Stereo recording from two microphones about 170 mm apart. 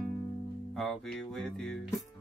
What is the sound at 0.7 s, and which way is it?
Music, centre (ahead or behind).